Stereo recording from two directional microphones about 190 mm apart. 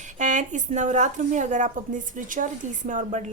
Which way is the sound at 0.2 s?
40° right (ahead or behind).